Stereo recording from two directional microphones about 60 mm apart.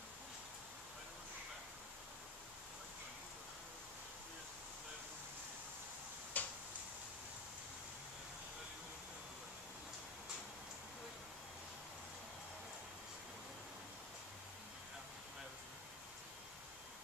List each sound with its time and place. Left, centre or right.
6.4 s tick-tock: left